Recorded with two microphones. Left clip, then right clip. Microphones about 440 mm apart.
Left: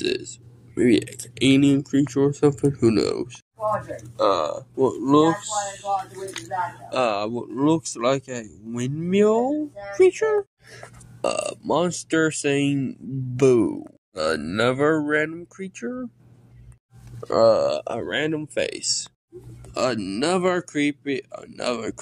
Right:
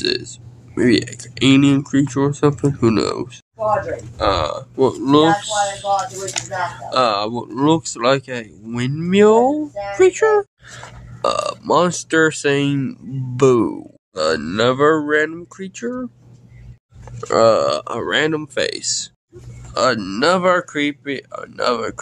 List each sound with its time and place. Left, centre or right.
0.0 s speech: left
6.9 s speech: left
17.3 s speech: left